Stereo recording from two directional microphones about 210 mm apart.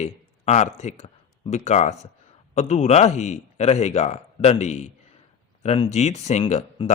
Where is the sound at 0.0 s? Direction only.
30° left (ahead or behind).